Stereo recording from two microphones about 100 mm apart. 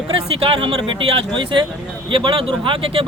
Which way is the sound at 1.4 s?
55° right (ahead or behind).